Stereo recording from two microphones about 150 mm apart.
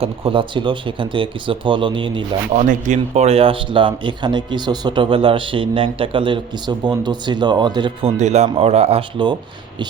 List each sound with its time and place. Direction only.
0.0 s speech: 35° right (ahead or behind)
2.5 s speech: 55° right (ahead or behind); by 7.9 s 30° right (ahead or behind)
8.0 s speech: 50° right (ahead or behind)